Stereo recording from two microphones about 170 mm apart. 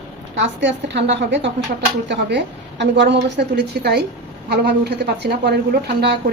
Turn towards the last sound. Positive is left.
turn(degrees=-80)